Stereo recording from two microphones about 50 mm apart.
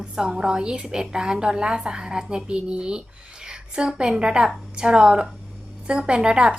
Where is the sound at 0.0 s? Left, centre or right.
Centre.